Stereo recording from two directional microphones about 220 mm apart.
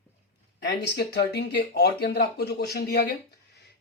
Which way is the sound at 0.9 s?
45° left (ahead or behind).